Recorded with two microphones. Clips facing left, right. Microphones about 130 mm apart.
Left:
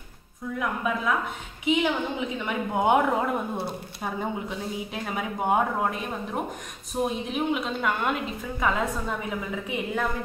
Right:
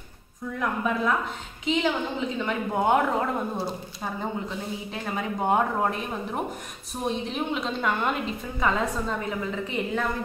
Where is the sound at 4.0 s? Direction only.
10° left (ahead or behind).